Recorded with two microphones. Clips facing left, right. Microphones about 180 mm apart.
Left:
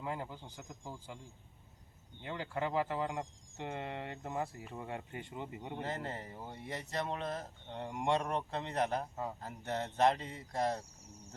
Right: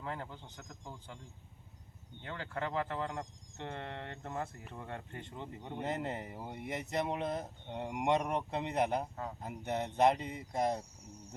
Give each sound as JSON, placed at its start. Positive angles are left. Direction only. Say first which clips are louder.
{"t": 0.0, "sound": "speech", "louder": "left 2 dB", "side_deg": 10}
{"t": 5.8, "sound": "speech", "louder": "right 5 dB", "side_deg": -20}